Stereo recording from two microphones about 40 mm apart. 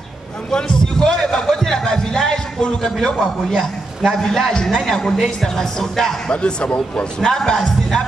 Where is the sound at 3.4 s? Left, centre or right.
Centre.